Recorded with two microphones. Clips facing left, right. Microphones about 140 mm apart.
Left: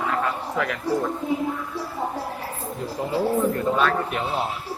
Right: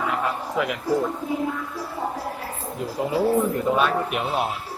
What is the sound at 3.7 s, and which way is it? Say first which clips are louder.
Speech: even; 15° right (ahead or behind).